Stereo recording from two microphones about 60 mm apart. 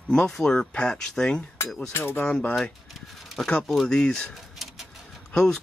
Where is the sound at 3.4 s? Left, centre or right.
Centre.